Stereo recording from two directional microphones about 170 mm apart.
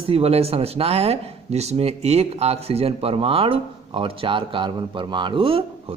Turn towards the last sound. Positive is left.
turn(degrees=-30)  # may be behind; listen again after turning